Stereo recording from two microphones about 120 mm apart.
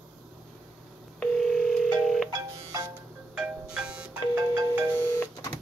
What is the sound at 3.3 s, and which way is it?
Music, 10° right (ahead or behind).